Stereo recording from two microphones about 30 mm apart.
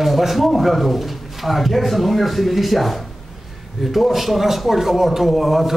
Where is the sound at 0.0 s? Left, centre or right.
Centre.